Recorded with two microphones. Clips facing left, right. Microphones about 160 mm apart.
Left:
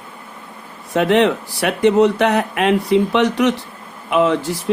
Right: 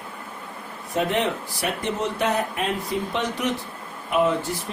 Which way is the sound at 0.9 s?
80° left.